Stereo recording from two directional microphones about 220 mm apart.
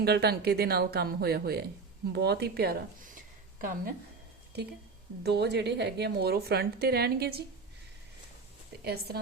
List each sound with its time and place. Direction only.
0.0 s a woman's voice: 45° right (ahead or behind)
5.2 s a woman's voice: 50° right (ahead or behind)
8.8 s a woman's voice: 45° right (ahead or behind)